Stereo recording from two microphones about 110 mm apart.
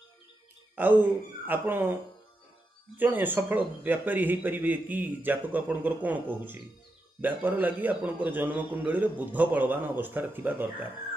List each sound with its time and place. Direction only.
0.8 s a man's voice: 20° right (ahead or behind)
3.0 s a man's voice: 15° right (ahead or behind)